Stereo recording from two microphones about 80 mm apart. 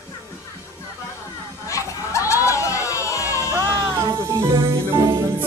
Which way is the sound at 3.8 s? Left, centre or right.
Right.